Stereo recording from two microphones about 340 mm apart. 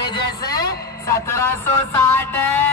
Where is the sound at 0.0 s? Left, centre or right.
Centre.